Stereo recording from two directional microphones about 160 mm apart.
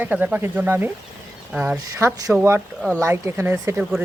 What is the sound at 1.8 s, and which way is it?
Speech, 20° right (ahead or behind).